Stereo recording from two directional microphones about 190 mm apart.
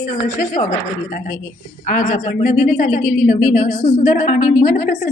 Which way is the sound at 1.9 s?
45° left (ahead or behind).